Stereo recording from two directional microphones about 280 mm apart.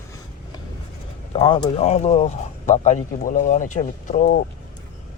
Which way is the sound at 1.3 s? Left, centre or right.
Centre.